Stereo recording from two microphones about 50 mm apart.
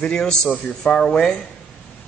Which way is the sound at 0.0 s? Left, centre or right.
Centre.